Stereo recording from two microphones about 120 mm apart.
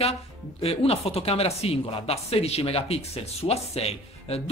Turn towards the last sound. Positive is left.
turn(degrees=60)  # may be behind; listen again after turning